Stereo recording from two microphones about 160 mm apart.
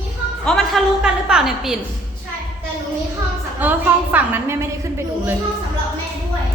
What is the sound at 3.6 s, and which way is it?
A woman's voice, 10° right (ahead or behind).